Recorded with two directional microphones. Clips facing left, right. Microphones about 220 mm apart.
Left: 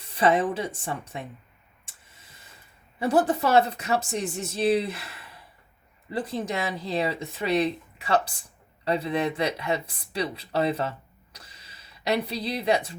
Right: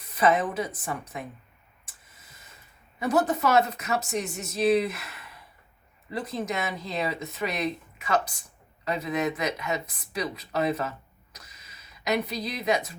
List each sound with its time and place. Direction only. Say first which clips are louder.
0.0 s a woman's voice: left 1 dB; 30° left (ahead or behind)
1.8 s a sound: left 1 dB; 30° left (ahead or behind)
3.0 s speech: left 2 dB; 30° left (ahead or behind)